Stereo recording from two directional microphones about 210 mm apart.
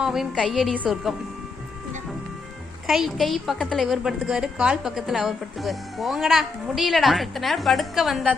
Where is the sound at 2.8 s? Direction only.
Centre (ahead or behind).